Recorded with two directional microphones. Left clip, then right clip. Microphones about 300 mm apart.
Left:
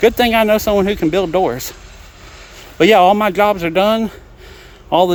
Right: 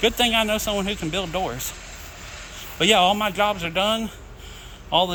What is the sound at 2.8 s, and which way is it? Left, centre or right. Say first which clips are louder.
Speech: left 8 dB; centre.